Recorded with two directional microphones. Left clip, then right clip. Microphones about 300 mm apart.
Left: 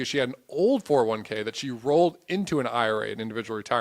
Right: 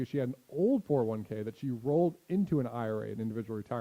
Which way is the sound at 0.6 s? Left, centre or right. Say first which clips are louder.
Left 7 dB; left.